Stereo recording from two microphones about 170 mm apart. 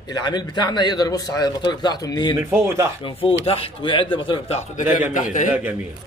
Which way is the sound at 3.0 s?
35° left (ahead or behind).